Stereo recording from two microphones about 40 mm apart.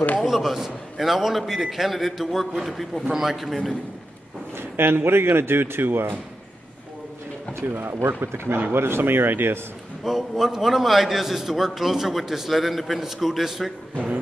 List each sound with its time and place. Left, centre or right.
0.2 s a man's voice: centre
4.6 s speech: right
7.7 s speech: right
8.2 s speech: right
10.0 s a man's voice: centre